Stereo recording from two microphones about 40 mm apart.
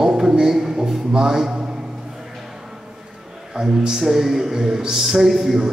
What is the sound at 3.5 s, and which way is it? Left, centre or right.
Speech, centre.